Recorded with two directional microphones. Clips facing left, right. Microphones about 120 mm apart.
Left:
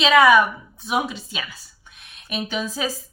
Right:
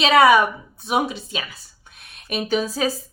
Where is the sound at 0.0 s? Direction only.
35° right (ahead or behind).